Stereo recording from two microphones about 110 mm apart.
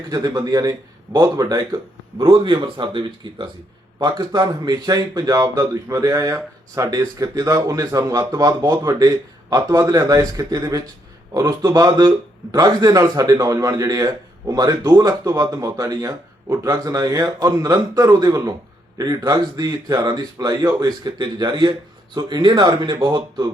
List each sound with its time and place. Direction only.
0.1 s a man's voice: 35° right (ahead or behind)